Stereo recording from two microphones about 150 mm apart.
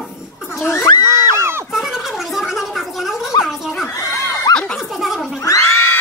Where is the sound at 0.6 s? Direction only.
15° left (ahead or behind).